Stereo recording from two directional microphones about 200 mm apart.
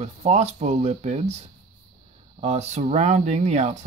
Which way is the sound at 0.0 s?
35° right (ahead or behind).